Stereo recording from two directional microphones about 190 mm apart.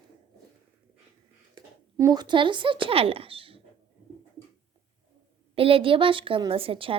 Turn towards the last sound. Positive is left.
turn(degrees=-30)  # may be behind; listen again after turning